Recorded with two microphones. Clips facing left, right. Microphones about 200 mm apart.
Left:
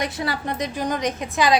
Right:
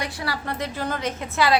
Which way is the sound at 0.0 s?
20° left (ahead or behind).